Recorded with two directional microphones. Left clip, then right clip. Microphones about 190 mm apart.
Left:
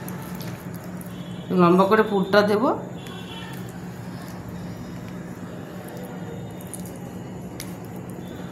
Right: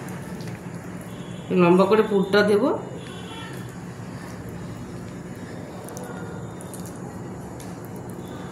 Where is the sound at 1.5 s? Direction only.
40° left (ahead or behind).